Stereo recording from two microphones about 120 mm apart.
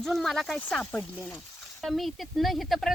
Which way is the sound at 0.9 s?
10° left (ahead or behind).